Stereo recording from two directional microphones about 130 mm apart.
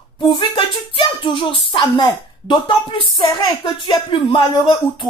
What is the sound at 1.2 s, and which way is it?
A woman's voice, 40° left (ahead or behind).